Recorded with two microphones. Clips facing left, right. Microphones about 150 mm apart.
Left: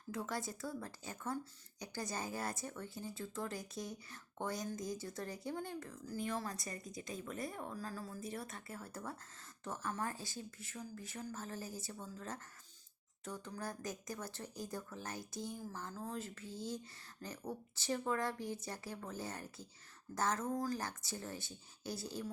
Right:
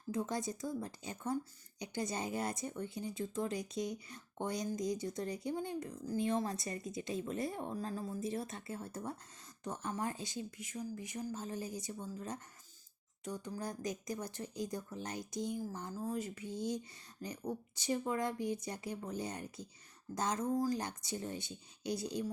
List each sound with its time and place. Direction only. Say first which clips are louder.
0.1 s speech: right 4 dB; 20° right (ahead or behind)